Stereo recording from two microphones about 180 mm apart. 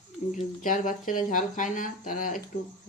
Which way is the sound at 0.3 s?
45° left (ahead or behind).